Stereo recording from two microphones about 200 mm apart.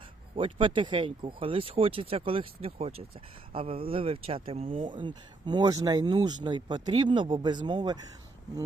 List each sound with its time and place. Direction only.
0.3 s speech: 25° right (ahead or behind)